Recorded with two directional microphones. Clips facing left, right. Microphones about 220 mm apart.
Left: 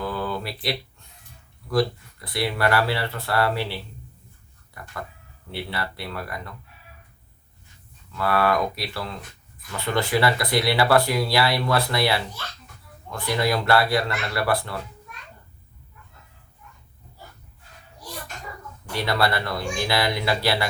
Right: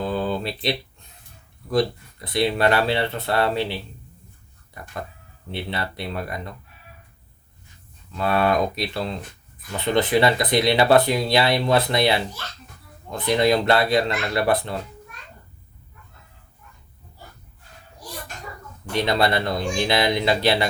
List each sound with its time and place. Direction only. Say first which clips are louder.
0.0 s a sound: right 4 dB; 20° right (ahead or behind)
1.7 s speech: right 1 dB; 20° right (ahead or behind)
5.5 s speech: right 2 dB; 20° right (ahead or behind)
8.1 s speech: right 2 dB; 20° right (ahead or behind)
18.9 s speech: right 3 dB; 20° right (ahead or behind)